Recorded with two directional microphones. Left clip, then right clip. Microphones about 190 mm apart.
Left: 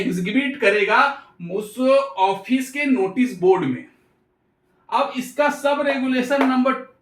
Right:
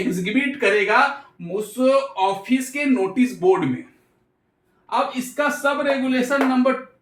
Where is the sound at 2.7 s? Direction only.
35° right (ahead or behind).